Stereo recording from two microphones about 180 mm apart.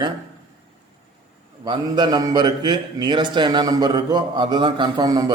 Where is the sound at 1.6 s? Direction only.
25° right (ahead or behind).